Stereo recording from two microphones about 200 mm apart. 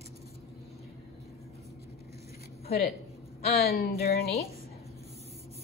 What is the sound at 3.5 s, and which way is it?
Speech, 50° left (ahead or behind).